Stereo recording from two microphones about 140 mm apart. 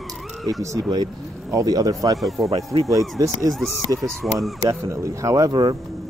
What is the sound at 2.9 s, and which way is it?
Speech, 25° right (ahead or behind).